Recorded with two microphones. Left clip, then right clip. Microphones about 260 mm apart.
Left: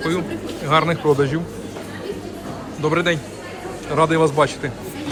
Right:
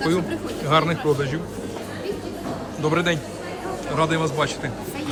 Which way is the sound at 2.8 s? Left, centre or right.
Centre.